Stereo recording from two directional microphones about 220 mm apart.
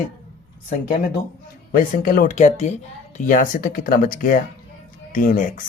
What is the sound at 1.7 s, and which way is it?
Speech, 40° left (ahead or behind).